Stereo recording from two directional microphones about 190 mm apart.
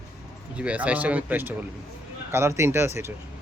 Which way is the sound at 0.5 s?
5° right (ahead or behind).